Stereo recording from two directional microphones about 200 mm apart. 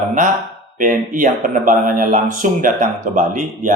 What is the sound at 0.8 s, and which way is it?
Mantra, 40° right (ahead or behind).